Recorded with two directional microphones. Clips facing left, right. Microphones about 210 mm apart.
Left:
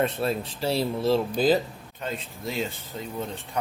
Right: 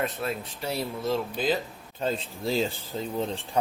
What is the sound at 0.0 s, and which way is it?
Speech, 30° left (ahead or behind).